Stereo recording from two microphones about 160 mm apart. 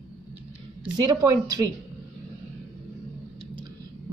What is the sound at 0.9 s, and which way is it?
Speech, 25° right (ahead or behind).